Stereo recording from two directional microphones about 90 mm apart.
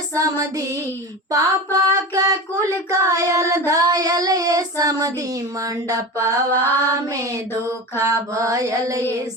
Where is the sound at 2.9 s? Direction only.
40° right (ahead or behind).